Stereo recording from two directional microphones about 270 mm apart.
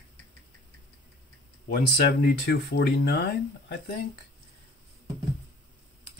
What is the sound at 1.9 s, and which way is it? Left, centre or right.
Speech, left.